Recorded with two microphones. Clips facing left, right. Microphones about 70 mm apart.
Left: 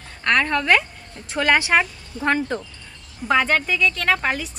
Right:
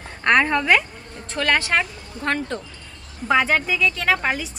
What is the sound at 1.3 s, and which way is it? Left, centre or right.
Speech, centre.